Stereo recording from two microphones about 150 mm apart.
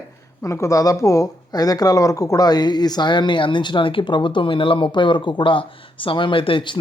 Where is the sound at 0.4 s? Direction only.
20° left (ahead or behind).